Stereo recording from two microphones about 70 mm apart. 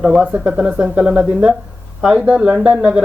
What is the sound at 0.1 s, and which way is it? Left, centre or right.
Speech, centre.